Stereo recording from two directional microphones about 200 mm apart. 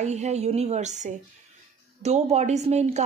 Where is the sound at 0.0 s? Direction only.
35° right (ahead or behind).